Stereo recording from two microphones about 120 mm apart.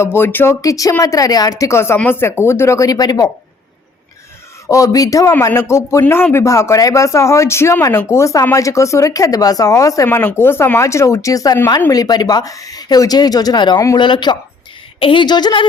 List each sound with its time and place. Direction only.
0.0 s speech: 20° left (ahead or behind)
0.6 s speech: 30° left (ahead or behind)
4.7 s speech: 30° left (ahead or behind)
14.0 s speech: 40° left (ahead or behind)